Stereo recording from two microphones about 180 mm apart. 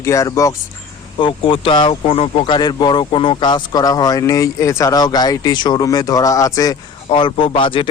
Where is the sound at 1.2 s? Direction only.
30° left (ahead or behind).